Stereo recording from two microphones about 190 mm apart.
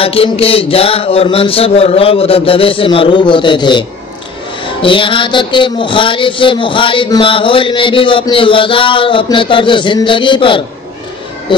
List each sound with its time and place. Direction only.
0.0 s music: 30° left (ahead or behind)